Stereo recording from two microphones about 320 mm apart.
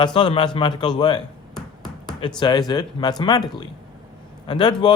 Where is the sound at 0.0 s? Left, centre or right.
Centre.